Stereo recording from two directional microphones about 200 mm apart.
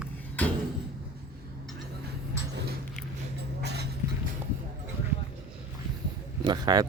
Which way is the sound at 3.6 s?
55° right (ahead or behind).